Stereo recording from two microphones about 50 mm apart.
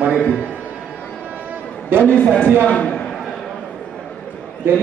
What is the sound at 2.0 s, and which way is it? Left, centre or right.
A man's voice, left.